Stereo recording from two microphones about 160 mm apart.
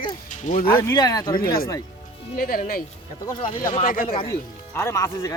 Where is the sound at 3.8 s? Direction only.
60° left (ahead or behind).